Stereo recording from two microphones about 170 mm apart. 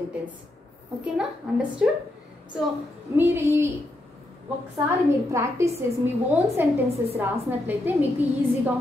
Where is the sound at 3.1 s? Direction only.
15° right (ahead or behind).